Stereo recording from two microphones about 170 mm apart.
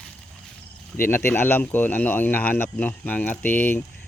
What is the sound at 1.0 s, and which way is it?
Speech, 15° left (ahead or behind).